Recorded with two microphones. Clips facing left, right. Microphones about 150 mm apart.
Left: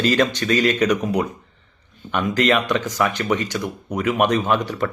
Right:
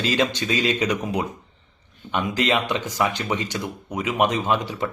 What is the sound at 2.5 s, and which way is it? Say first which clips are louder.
Speech: left 4 dB; 20° right (ahead or behind).